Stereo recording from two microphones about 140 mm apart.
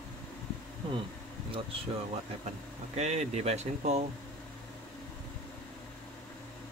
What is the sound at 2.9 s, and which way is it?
Speech, 50° right (ahead or behind).